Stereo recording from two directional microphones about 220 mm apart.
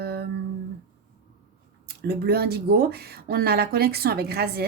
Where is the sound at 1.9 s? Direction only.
45° right (ahead or behind).